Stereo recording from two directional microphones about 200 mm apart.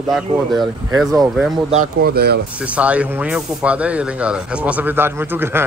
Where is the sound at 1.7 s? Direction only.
45° right (ahead or behind).